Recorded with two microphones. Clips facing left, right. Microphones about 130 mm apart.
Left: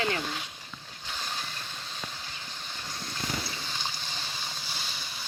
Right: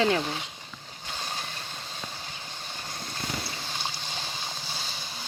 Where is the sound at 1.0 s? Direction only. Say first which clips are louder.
Right 1 dB; 25° right (ahead or behind).